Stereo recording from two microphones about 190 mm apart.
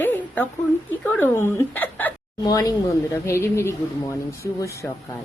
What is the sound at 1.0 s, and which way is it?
Speech, 10° left (ahead or behind).